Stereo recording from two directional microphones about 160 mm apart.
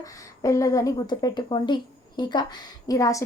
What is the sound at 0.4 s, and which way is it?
A woman's voice, 20° left (ahead or behind).